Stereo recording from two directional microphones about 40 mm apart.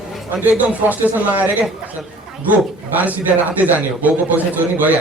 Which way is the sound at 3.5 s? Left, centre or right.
Right.